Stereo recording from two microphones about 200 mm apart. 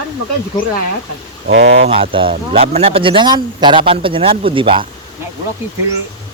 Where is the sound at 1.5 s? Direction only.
65° right (ahead or behind).